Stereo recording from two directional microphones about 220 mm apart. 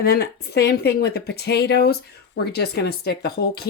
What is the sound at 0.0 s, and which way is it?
A woman's voice, 45° left (ahead or behind).